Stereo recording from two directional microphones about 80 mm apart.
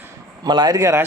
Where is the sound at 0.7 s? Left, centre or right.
Right.